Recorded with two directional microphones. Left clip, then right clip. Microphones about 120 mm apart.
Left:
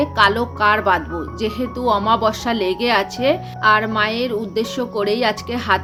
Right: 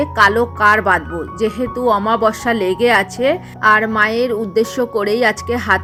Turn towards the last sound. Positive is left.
turn(degrees=-40)  # may be behind; listen again after turning